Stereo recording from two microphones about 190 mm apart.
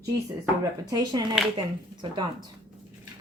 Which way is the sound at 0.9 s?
20° right (ahead or behind).